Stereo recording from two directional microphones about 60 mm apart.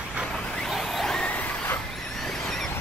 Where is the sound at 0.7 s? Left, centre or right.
Centre.